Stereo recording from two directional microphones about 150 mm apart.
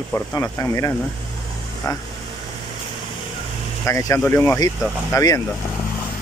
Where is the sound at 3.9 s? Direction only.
20° left (ahead or behind).